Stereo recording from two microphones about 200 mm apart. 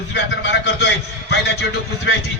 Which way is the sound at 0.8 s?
60° left (ahead or behind).